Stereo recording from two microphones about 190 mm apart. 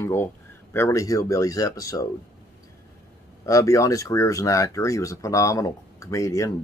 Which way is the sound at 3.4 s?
15° left (ahead or behind).